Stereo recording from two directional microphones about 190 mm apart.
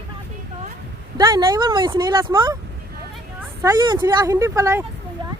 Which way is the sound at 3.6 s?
20° right (ahead or behind).